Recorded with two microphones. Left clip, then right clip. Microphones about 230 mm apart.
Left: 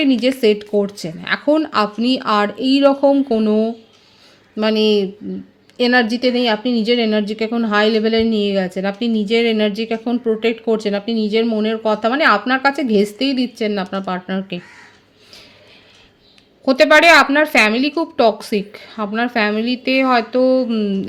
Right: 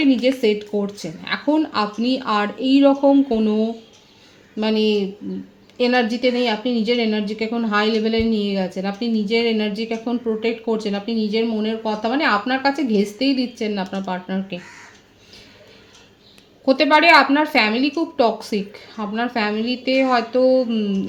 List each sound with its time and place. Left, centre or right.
0.0 s speech: left
16.6 s speech: left